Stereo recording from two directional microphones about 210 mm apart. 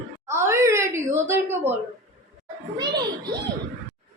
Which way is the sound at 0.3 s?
10° right (ahead or behind).